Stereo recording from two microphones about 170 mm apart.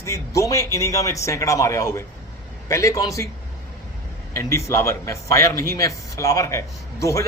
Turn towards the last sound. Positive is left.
turn(degrees=20)  # may be behind; listen again after turning